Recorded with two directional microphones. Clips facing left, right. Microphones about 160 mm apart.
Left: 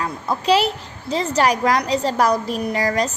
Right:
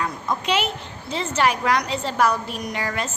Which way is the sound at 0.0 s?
35° left (ahead or behind).